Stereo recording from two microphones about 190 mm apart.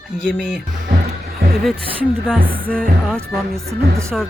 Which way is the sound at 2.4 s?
25° right (ahead or behind).